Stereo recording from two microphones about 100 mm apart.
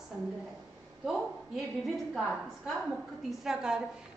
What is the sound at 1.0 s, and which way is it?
A woman's voice, centre (ahead or behind).